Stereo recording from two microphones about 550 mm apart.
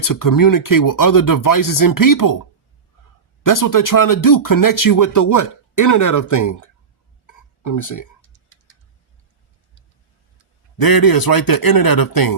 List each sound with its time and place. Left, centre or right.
0.0 s speech: left
3.4 s speech: left
10.8 s speech: left